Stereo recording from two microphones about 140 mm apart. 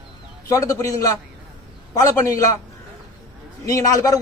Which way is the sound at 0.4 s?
20° left (ahead or behind).